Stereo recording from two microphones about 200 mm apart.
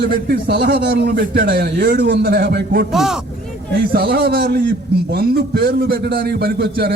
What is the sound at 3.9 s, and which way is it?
A man's voice, 50° right (ahead or behind).